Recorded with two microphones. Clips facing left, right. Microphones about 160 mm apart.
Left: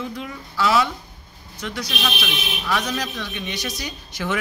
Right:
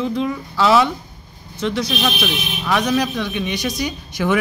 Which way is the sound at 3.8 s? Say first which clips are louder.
Right 8 dB; 10° right (ahead or behind).